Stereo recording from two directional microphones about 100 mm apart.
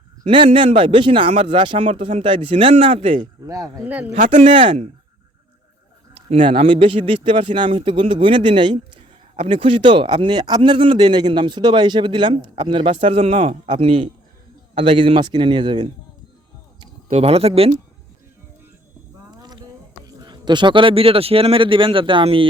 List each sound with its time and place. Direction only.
0.3 s speech: 60° right (ahead or behind)
3.4 s speech: 35° right (ahead or behind)
4.1 s speech: 65° right (ahead or behind)
6.1 s speech: 65° right (ahead or behind)
9.3 s speech: 70° right (ahead or behind); by 15.9 s 55° right (ahead or behind)
17.2 s speech: 85° right
19.3 s a sound: 45° right (ahead or behind)
20.1 s speech: 40° right (ahead or behind); by 22.4 s 65° right (ahead or behind)